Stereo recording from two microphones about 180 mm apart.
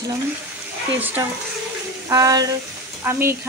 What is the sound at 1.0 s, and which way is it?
Speech, 10° right (ahead or behind).